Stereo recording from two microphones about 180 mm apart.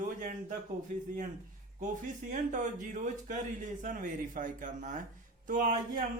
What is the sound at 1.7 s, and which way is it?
Speech, 45° right (ahead or behind).